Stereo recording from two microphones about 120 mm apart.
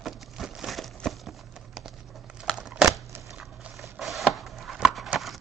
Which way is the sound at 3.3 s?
5° right (ahead or behind).